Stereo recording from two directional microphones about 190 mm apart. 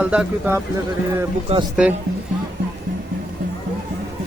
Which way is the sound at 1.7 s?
5° right (ahead or behind).